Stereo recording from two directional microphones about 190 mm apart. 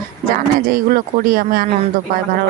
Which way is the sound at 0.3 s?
50° right (ahead or behind).